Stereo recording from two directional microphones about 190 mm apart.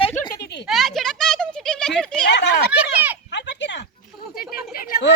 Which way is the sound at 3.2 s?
65° left (ahead or behind).